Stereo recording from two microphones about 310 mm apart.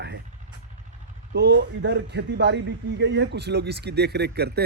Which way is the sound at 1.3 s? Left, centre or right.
Right.